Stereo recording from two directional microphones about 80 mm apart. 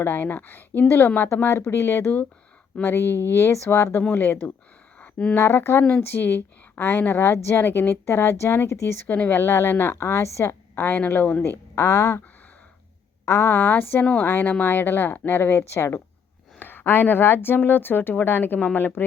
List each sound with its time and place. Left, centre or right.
0.0 s a woman's voice: left
4.9 s a sound: centre
5.4 s a woman's voice: left
9.1 s speech: centre
9.4 s a woman's voice: left
13.2 s speech: left